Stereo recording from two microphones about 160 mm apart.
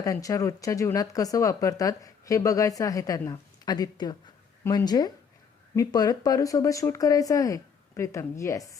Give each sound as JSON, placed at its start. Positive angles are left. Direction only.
{"t": 0.0, "sound": "speech", "side_deg": 20}